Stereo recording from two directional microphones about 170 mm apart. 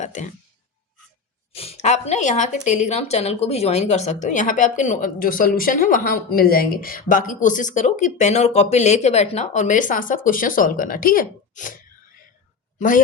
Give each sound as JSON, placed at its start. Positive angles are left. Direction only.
{"t": 0.0, "sound": "speech", "side_deg": 45}
{"t": 1.5, "sound": "speech", "side_deg": 35}